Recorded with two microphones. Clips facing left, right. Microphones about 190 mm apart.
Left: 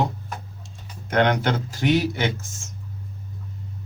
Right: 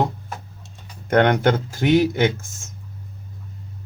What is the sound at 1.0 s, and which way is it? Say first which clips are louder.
Speech: right 4 dB; 55° right (ahead or behind).